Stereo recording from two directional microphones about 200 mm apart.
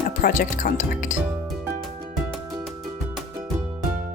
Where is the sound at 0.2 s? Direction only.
40° left (ahead or behind).